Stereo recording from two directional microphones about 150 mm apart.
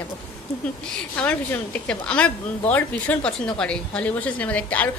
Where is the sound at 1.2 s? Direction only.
10° left (ahead or behind).